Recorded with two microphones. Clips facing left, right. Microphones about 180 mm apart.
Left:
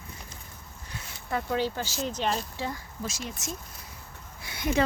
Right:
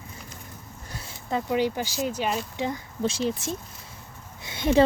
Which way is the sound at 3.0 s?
30° right (ahead or behind).